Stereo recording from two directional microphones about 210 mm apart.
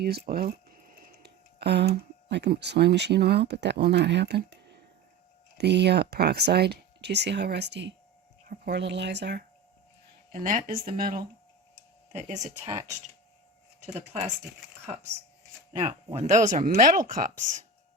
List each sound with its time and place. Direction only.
0.0 s speech: 50° right (ahead or behind)
5.5 s speech: 55° right (ahead or behind)
10.3 s speech: 40° right (ahead or behind)
13.8 s speech: 35° right (ahead or behind)
15.8 s speech: 15° right (ahead or behind)
16.1 s speech: 35° right (ahead or behind)